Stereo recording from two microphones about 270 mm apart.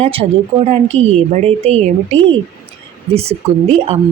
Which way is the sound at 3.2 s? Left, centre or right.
Right.